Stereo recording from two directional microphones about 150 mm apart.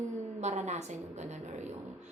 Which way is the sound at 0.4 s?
50° right (ahead or behind).